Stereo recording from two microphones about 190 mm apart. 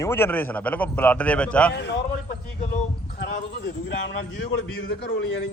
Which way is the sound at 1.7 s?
65° left (ahead or behind).